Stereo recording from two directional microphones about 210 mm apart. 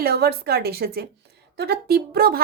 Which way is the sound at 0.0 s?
50° right (ahead or behind).